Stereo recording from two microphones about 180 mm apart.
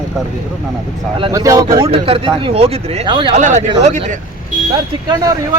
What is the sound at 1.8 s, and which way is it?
Speech, 30° right (ahead or behind).